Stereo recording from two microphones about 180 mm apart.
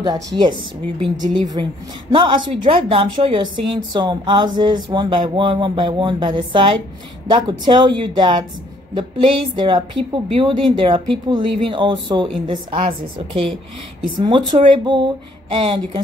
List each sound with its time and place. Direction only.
0.0 s a woman's voice: 25° right (ahead or behind)